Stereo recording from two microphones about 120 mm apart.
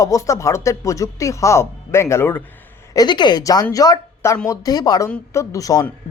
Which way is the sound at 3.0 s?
40° left (ahead or behind).